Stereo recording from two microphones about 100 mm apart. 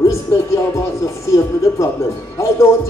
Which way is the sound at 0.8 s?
30° left (ahead or behind).